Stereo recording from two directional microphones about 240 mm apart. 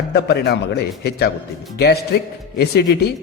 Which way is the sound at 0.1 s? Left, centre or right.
Left.